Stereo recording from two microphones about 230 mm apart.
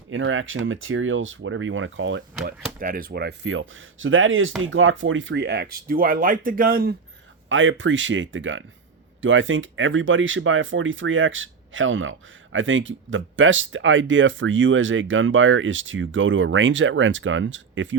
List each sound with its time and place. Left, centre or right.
0.1 s speech: right
2.7 s speech: right
7.5 s speech: right